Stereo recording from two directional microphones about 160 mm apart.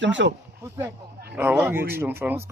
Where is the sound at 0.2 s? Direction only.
90° right.